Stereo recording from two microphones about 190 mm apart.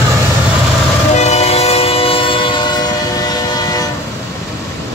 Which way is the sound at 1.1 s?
35° left (ahead or behind).